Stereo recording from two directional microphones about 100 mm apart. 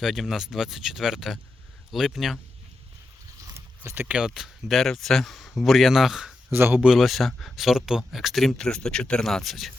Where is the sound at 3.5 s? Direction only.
25° right (ahead or behind).